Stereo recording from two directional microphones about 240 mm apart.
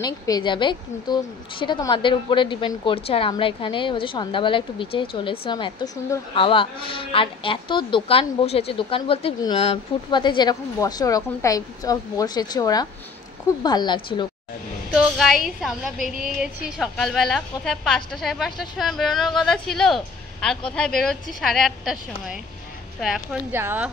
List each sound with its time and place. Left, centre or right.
0.0 s a woman's voice: centre
14.9 s a woman's voice: centre